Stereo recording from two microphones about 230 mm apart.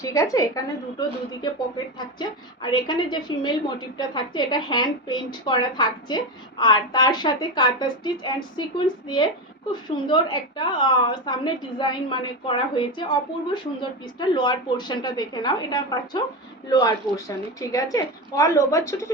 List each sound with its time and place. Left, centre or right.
0.0 s a woman's voice: centre
10.1 s a woman's voice: centre